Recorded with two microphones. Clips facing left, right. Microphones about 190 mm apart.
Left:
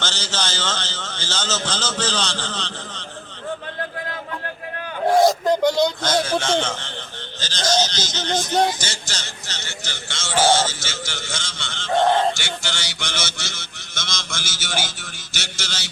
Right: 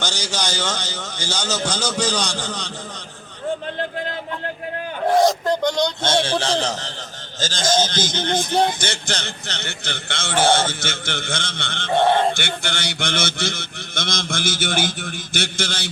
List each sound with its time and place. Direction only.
0.0 s a man's voice: 15° right (ahead or behind)
5.0 s a man's voice: centre (ahead or behind)
6.0 s a man's voice: 25° right (ahead or behind); by 15.9 s 55° right (ahead or behind)